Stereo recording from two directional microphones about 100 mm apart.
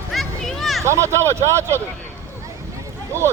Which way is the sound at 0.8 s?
30° right (ahead or behind).